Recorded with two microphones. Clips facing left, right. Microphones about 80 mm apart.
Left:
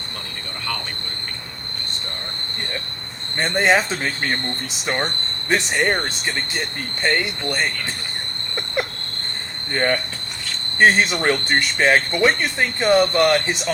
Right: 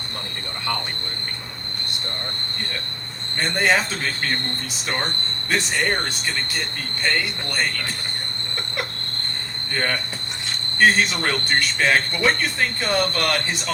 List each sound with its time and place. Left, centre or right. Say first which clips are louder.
3.3 s speech: left 3 dB; left
5.5 s speech: left 3 dB; left
7.0 s speech: left 3 dB; left
9.7 s speech: left 4 dB; left